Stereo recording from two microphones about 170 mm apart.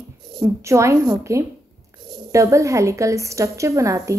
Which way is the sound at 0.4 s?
15° right (ahead or behind).